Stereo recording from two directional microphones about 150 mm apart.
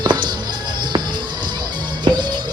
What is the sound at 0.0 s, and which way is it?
Music, 30° right (ahead or behind).